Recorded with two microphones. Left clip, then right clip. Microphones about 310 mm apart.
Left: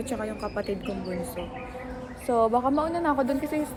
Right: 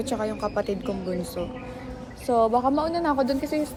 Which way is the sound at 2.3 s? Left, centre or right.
Centre.